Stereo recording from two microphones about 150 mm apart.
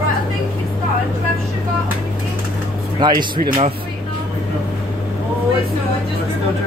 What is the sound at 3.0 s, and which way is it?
Speech, 30° right (ahead or behind).